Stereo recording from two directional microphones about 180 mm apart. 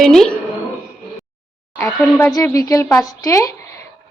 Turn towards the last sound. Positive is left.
turn(degrees=20)  # may be behind; listen again after turning